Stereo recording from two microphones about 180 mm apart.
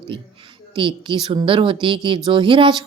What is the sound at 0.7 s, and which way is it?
Speech, 25° right (ahead or behind).